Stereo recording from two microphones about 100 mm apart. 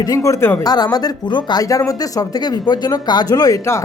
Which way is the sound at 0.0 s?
35° left (ahead or behind).